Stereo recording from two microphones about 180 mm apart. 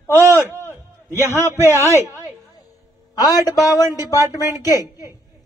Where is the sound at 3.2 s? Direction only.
20° left (ahead or behind).